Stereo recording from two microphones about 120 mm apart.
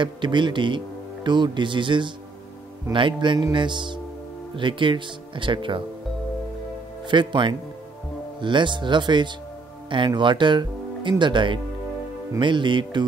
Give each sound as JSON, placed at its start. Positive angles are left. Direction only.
{"t": 0.0, "sound": "speech", "side_deg": -40}
{"t": 7.1, "sound": "speech", "side_deg": -40}